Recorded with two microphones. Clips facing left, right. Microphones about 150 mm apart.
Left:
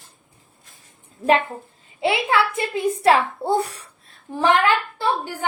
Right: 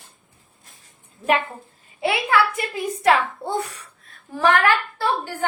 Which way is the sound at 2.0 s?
25° left (ahead or behind).